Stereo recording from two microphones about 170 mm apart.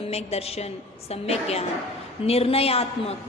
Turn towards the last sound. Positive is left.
turn(degrees=35)  # may be behind; listen again after turning